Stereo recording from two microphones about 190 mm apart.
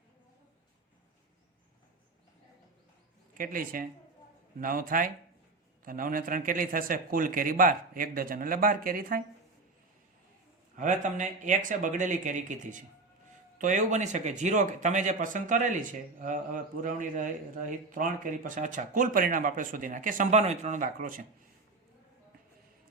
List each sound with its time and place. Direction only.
3.3 s speech: 45° right (ahead or behind)
10.8 s speech: 40° right (ahead or behind)